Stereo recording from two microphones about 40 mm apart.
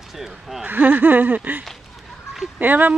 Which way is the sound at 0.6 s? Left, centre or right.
Right.